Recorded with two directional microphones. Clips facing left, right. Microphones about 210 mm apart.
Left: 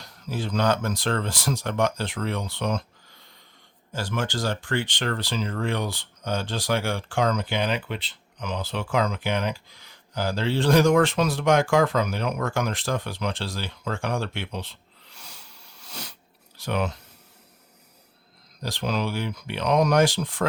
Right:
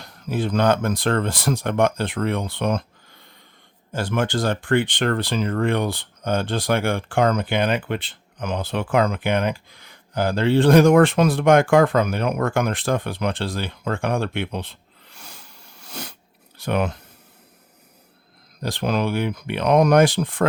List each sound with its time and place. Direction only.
0.0 s speech: 55° right (ahead or behind)
18.6 s speech: 55° right (ahead or behind)